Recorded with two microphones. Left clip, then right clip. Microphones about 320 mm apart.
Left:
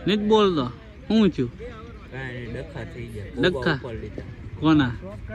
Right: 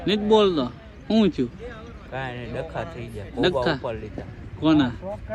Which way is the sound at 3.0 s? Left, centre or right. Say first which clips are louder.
Left 1 dB; centre.